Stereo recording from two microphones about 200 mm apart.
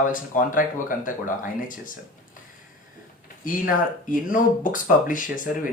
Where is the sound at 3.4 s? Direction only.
40° left (ahead or behind).